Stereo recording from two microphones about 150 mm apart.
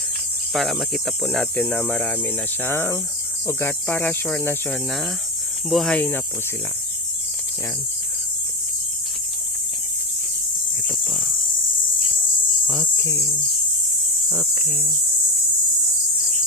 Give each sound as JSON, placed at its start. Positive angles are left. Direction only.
{"t": 0.5, "sound": "speech", "side_deg": 0}
{"t": 11.0, "sound": "cricket", "side_deg": 0}
{"t": 13.0, "sound": "cricket", "side_deg": 20}